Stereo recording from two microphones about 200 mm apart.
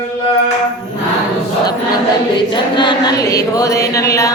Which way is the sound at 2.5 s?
25° left (ahead or behind).